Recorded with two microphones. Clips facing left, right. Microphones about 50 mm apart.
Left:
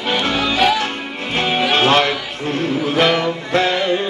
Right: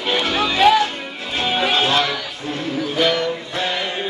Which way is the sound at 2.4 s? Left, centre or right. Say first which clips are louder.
Left 5 dB; left.